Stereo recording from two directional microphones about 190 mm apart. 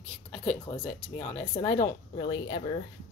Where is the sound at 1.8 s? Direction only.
20° left (ahead or behind).